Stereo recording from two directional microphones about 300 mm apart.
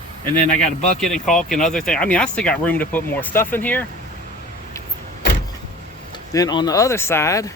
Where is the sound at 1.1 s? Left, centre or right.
Centre.